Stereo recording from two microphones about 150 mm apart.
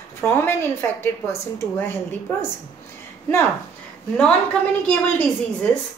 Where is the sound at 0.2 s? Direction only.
15° left (ahead or behind).